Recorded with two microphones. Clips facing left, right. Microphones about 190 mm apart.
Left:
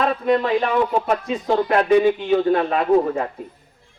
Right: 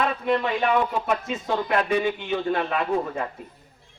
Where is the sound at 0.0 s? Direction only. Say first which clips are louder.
Left 5 dB; 40° left (ahead or behind).